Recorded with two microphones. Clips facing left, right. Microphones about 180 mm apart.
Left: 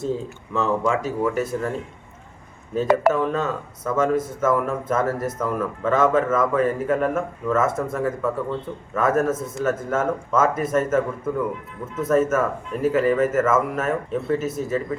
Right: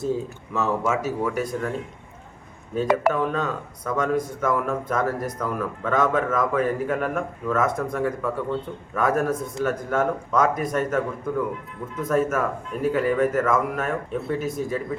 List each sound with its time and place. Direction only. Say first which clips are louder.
0.5 s speech: left 2 dB; 5° right (ahead or behind)
2.7 s speech: left 3 dB; 5° right (ahead or behind)